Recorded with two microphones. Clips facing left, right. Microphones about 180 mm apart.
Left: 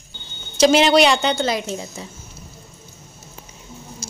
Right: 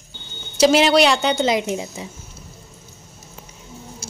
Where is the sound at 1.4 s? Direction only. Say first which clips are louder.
Right 3 dB; 20° right (ahead or behind).